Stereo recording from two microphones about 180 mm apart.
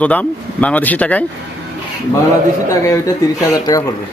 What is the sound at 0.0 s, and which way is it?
Speech, 10° left (ahead or behind).